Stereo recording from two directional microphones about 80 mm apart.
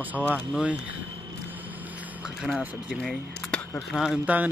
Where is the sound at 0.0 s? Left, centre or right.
Right.